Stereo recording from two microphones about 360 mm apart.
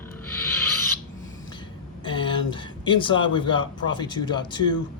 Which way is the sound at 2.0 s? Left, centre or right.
Centre.